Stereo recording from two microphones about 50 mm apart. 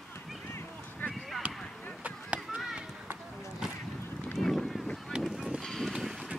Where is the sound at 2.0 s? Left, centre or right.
Right.